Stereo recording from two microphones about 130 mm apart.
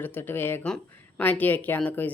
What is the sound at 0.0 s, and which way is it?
Speech, 15° left (ahead or behind).